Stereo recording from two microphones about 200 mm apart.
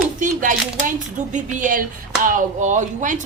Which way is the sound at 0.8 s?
40° right (ahead or behind).